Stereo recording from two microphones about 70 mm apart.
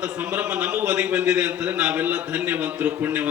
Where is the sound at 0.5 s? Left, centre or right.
Centre.